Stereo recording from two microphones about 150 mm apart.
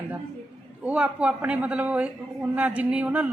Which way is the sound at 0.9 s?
5° right (ahead or behind).